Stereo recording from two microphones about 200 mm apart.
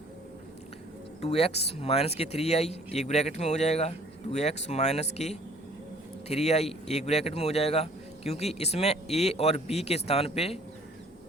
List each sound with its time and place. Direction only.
1.2 s speech: 30° left (ahead or behind)